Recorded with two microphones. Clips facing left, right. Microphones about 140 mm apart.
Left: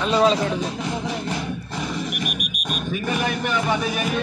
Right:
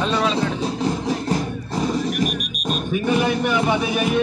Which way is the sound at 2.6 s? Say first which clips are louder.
Right 5 dB; 30° right (ahead or behind).